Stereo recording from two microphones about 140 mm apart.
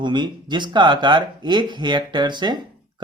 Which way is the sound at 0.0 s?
35° right (ahead or behind).